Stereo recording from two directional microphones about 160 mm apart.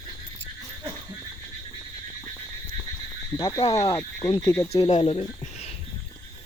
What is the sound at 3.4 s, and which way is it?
Speech, 20° left (ahead or behind).